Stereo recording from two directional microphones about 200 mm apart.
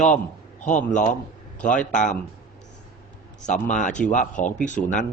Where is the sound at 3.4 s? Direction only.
35° left (ahead or behind).